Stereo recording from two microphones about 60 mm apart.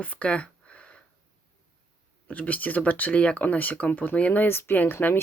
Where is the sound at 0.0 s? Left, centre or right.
Left.